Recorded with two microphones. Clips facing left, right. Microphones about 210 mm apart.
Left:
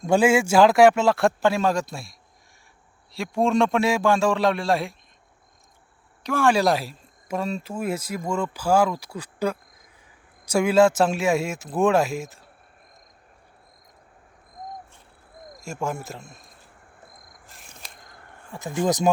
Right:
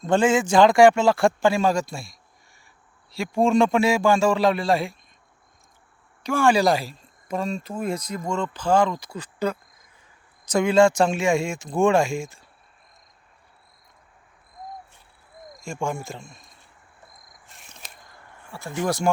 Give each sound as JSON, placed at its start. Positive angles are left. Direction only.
{"t": 0.0, "sound": "speech", "side_deg": 10}
{"t": 6.2, "sound": "speech", "side_deg": 0}
{"t": 15.6, "sound": "speech", "side_deg": 5}
{"t": 17.4, "sound": "a sound", "side_deg": 0}
{"t": 18.5, "sound": "speech", "side_deg": 20}